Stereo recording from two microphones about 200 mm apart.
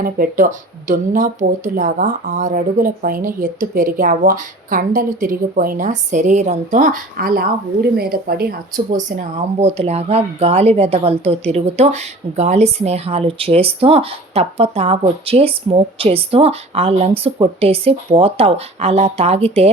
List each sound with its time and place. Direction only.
0.0 s speech: 45° right (ahead or behind)
9.0 s speech: 40° right (ahead or behind)